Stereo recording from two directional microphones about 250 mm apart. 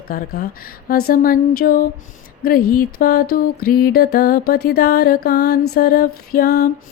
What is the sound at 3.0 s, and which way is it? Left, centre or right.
Mantra, left.